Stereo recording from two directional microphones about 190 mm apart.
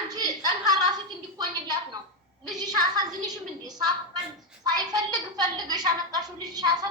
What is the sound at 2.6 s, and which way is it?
A woman's voice, 20° right (ahead or behind).